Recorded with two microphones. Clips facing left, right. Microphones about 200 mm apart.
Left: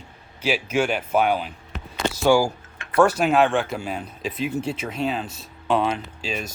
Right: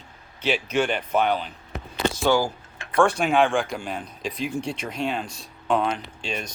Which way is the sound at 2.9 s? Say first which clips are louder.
Left 2 dB; 5° left (ahead or behind).